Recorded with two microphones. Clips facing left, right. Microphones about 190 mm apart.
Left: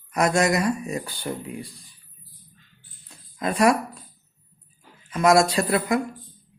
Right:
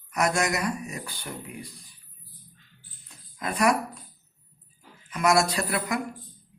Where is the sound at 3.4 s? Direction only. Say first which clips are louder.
Left 4 dB; 30° left (ahead or behind).